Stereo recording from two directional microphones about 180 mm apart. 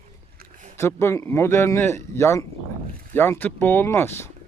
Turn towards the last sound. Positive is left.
turn(degrees=15)  # may be behind; listen again after turning